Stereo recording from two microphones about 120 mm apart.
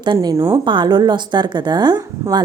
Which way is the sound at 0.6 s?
40° right (ahead or behind).